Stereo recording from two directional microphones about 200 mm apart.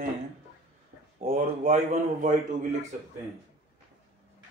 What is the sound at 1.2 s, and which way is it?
Speech, 45° right (ahead or behind).